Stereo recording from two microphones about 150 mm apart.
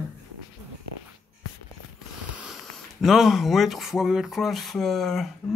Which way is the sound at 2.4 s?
Centre (ahead or behind).